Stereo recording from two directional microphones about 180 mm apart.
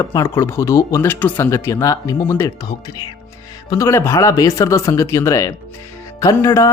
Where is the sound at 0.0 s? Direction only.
20° left (ahead or behind).